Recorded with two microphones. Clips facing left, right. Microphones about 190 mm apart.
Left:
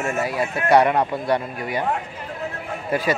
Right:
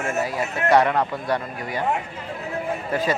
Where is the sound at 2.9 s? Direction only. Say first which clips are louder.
Left 2 dB; 10° left (ahead or behind).